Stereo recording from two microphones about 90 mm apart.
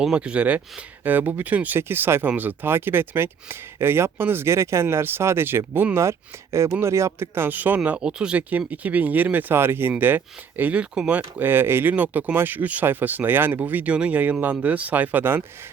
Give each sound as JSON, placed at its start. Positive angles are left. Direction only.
{"t": 0.0, "sound": "speech", "side_deg": -10}
{"t": 11.2, "sound": "speech", "side_deg": -25}